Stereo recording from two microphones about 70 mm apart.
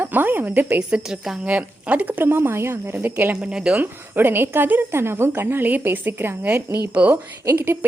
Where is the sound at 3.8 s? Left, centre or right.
Right.